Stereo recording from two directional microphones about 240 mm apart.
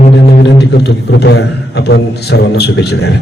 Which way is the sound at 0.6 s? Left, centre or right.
Left.